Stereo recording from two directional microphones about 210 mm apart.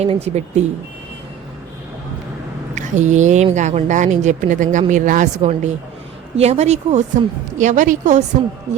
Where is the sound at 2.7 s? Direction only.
35° right (ahead or behind).